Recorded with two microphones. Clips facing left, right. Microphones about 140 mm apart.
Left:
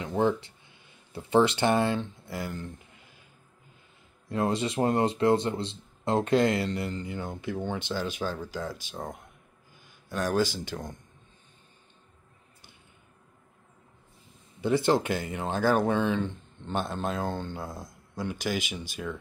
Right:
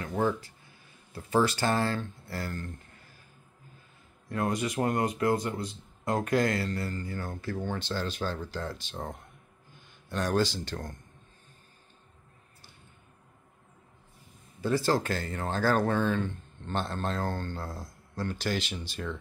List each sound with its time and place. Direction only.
0.0 s speech: 20° left (ahead or behind)
4.3 s speech: 25° left (ahead or behind)
14.6 s speech: 20° left (ahead or behind)